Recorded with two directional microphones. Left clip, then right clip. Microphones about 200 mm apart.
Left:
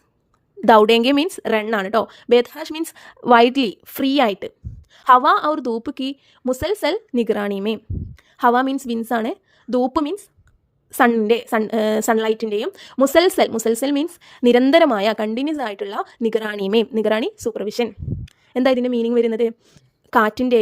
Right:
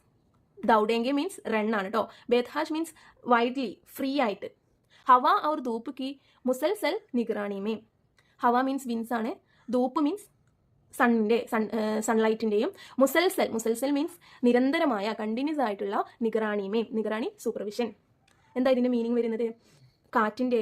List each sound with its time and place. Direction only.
0.6 s a woman's voice: 45° left (ahead or behind)